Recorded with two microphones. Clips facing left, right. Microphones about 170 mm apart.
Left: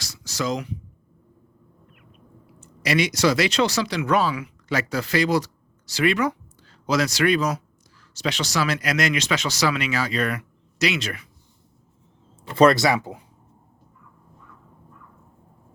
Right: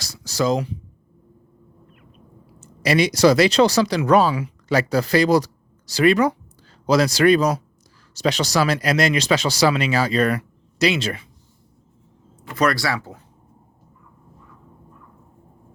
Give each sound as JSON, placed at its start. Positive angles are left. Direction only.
{"t": 0.0, "sound": "a sound", "side_deg": -35}
{"t": 2.6, "sound": "speech", "side_deg": -35}
{"t": 12.4, "sound": "speech", "side_deg": 25}